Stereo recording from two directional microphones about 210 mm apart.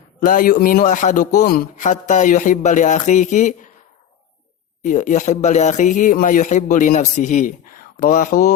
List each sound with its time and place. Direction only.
0.3 s speech: 40° left (ahead or behind)
4.8 s speech: 35° left (ahead or behind)